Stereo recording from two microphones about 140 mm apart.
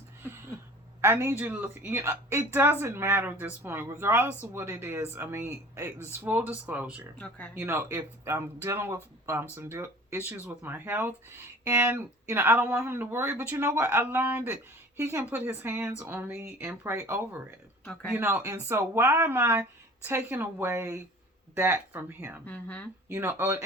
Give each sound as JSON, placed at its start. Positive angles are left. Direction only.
{"t": 0.2, "sound": "a sound", "side_deg": -15}
{"t": 1.0, "sound": "speech", "side_deg": -15}
{"t": 7.2, "sound": "speech", "side_deg": 10}
{"t": 7.6, "sound": "speech", "side_deg": -20}
{"t": 22.4, "sound": "speech", "side_deg": 10}
{"t": 23.0, "sound": "speech", "side_deg": -15}